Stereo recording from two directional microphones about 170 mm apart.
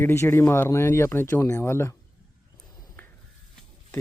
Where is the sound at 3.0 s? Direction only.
10° left (ahead or behind).